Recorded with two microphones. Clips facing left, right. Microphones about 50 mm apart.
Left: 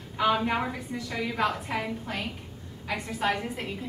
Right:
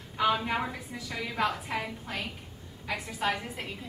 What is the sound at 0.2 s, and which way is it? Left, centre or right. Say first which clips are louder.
A woman's voice: left 2 dB; centre.